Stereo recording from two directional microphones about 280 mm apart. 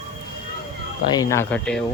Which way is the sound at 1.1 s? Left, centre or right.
Centre.